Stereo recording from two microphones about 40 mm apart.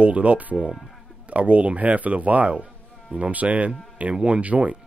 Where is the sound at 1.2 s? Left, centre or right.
Right.